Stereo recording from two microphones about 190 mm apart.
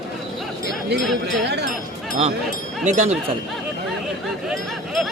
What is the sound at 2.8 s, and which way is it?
Speech, 40° right (ahead or behind).